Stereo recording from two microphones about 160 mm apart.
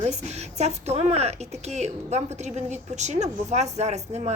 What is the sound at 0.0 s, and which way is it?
A woman's voice, 45° right (ahead or behind).